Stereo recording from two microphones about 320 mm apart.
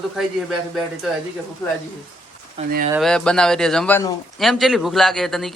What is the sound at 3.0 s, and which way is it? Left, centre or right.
A man's voice, centre.